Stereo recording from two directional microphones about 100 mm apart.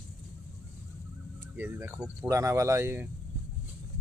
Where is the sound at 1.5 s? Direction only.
20° right (ahead or behind).